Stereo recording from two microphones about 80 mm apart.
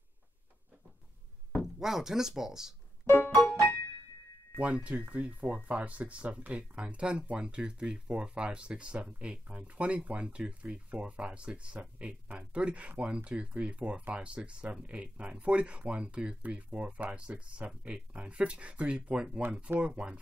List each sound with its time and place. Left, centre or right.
1.6 s speech: centre
3.1 s music: left
4.6 s speech: centre